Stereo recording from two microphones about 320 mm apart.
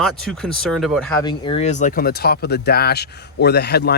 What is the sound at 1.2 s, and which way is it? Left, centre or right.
Speech, centre.